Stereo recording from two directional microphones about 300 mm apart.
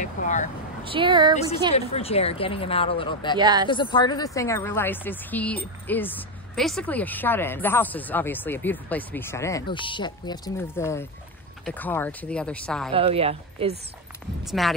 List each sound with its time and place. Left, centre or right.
0.0 s speech: left
0.8 s speech: centre
1.8 s speech: centre
3.3 s speech: centre
3.6 s speech: centre
12.9 s a woman's voice: centre
14.4 s speech: centre